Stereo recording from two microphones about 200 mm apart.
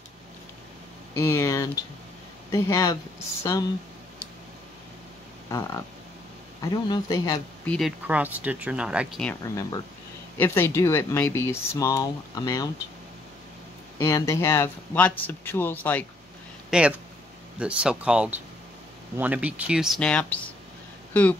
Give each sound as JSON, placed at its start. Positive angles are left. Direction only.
{"t": 1.1, "sound": "speech", "side_deg": 15}
{"t": 5.5, "sound": "speech", "side_deg": 15}
{"t": 7.6, "sound": "speech", "side_deg": 5}
{"t": 8.1, "sound": "speech", "side_deg": -10}
{"t": 9.3, "sound": "speech", "side_deg": 15}
{"t": 13.9, "sound": "speech", "side_deg": 15}
{"t": 16.7, "sound": "speech", "side_deg": -5}